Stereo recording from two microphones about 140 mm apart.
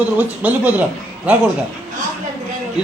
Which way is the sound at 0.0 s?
10° right (ahead or behind).